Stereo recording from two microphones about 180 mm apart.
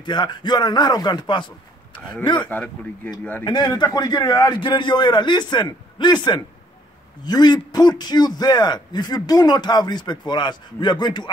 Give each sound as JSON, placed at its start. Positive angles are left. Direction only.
{"t": 0.0, "sound": "a man's voice", "side_deg": 25}
{"t": 2.5, "sound": "speech", "side_deg": 10}
{"t": 3.4, "sound": "a man's voice", "side_deg": 25}